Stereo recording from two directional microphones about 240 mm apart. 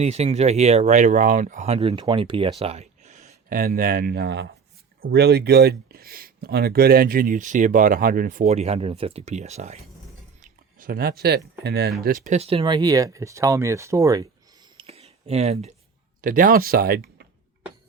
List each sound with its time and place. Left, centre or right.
0.0 s speech: right
14.8 s a sound: right
16.2 s speech: right